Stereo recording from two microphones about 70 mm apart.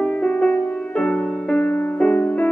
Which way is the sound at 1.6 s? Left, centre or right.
Left.